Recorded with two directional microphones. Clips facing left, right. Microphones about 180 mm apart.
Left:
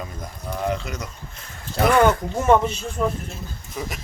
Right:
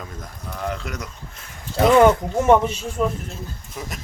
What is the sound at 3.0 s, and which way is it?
Speech, 10° right (ahead or behind).